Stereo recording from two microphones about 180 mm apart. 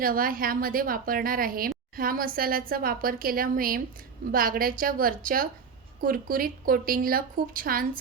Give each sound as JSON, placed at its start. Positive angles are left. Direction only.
{"t": 0.0, "sound": "speech", "side_deg": -50}